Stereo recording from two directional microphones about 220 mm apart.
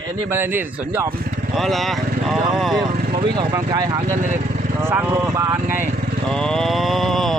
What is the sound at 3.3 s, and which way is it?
Speech, 20° right (ahead or behind).